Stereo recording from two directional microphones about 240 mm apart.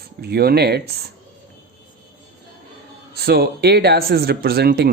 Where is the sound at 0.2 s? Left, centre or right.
Right.